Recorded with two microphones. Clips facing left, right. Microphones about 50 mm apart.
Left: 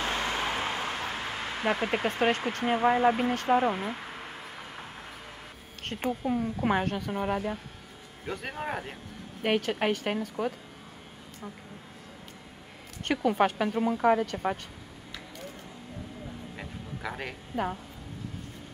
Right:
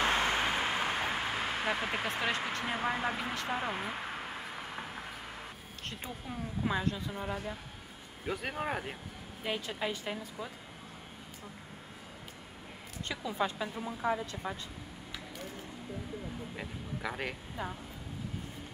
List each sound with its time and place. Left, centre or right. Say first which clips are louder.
0.0 s vehicle: right 1 dB; right
0.4 s a sound: left 1 dB; centre
1.7 s speech: left 9 dB; centre
2.0 s speech: left 9 dB; left
2.9 s speech: left 10 dB; centre
3.3 s a woman's voice: left 9 dB; left
3.7 s speech: left 3 dB; centre
4.5 s vehicle: right 1 dB; centre
5.9 s speech: left 11 dB; left
6.2 s a woman's voice: left 6 dB; left
8.3 s speech: left 1 dB; centre
9.4 s a woman's voice: left 9 dB; left
13.0 s a woman's voice: left 9 dB; left
16.5 s a sound: left 1 dB; centre